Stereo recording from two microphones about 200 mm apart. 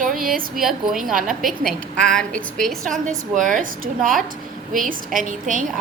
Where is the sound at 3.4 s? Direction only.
40° right (ahead or behind).